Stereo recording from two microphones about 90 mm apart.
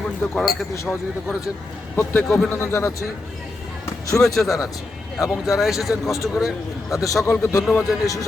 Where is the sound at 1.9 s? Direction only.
20° left (ahead or behind).